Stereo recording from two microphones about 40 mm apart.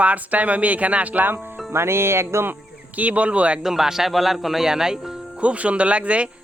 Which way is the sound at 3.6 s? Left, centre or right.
Centre.